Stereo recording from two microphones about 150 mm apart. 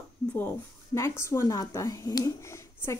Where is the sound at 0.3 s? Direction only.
15° left (ahead or behind).